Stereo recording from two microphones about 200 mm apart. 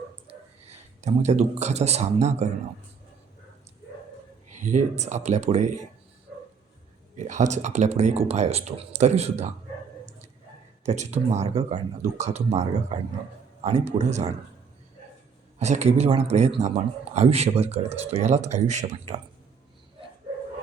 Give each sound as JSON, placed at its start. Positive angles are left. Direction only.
{"t": 0.3, "sound": "speech", "side_deg": -35}
{"t": 4.5, "sound": "speech", "side_deg": -35}
{"t": 7.2, "sound": "speech", "side_deg": -35}
{"t": 10.8, "sound": "speech", "side_deg": -35}
{"t": 15.5, "sound": "speech", "side_deg": -35}